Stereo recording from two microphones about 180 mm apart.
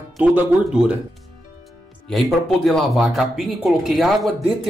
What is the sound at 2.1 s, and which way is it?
Speech, centre (ahead or behind).